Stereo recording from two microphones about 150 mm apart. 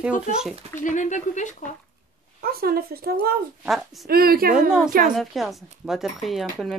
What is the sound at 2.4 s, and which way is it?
Speech, 90° right.